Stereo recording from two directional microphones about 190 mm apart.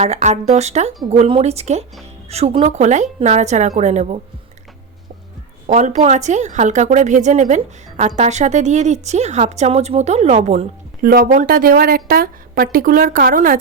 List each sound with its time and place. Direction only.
0.0 s a woman's voice: 35° right (ahead or behind)
5.6 s a woman's voice: 40° right (ahead or behind)
11.0 s a woman's voice: 50° right (ahead or behind)